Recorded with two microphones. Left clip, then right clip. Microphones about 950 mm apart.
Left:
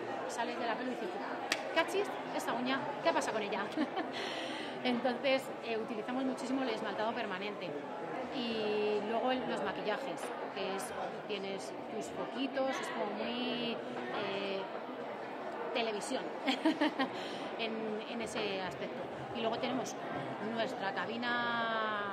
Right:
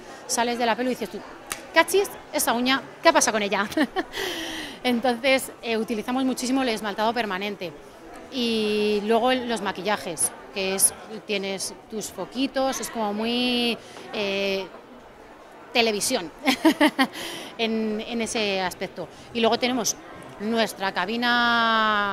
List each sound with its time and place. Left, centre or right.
0.4 s a woman's voice: right
15.7 s a woman's voice: right